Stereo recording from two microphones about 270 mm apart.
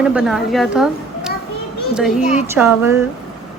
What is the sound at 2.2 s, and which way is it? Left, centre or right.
Speech, left.